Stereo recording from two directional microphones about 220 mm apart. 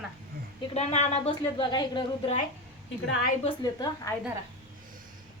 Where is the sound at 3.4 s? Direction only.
20° left (ahead or behind).